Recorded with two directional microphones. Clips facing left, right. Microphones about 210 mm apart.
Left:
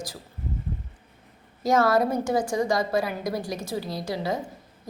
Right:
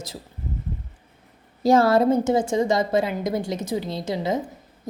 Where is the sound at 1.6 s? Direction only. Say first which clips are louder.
Right 4 dB; 30° right (ahead or behind).